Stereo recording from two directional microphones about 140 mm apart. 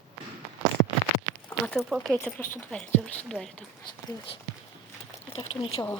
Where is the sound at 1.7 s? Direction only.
Centre (ahead or behind).